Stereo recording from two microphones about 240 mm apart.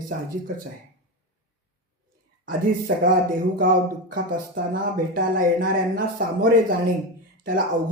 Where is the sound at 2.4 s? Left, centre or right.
Right.